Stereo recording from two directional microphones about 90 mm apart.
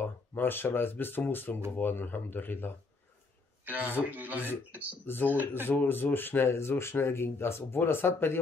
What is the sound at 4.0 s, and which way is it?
Speech, 20° right (ahead or behind).